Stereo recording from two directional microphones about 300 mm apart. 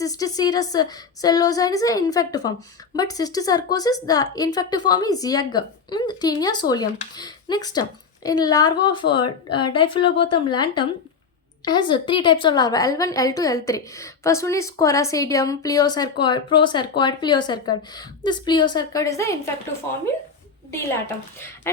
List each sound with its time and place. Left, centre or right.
0.0 s speech: centre